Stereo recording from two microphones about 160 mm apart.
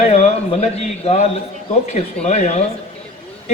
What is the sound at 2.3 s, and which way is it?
Speech, 45° left (ahead or behind).